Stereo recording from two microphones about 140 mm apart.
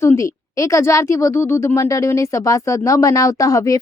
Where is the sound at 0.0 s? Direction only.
20° left (ahead or behind).